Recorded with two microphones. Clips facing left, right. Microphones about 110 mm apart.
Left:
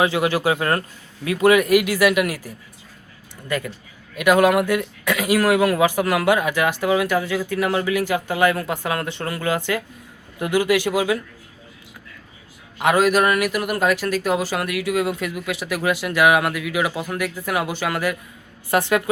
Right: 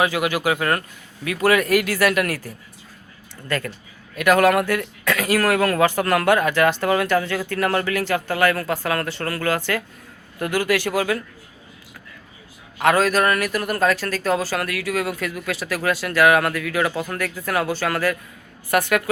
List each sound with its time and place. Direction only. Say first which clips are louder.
0.0 s a man's voice: left 2 dB; 25° left (ahead or behind)
3.5 s speech: even; 15° left (ahead or behind)
12.8 s speech: left 1 dB; 15° left (ahead or behind)
18.7 s a man's voice: left 1 dB; 25° left (ahead or behind)